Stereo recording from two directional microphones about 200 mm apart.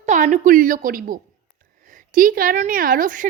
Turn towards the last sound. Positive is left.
turn(degrees=-40)  # may be behind; listen again after turning